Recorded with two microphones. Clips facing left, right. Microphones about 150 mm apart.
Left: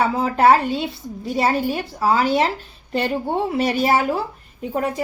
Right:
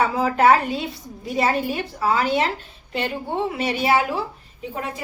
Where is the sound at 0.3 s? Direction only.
30° left (ahead or behind).